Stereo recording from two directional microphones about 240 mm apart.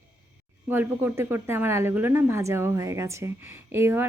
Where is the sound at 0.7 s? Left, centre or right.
Centre.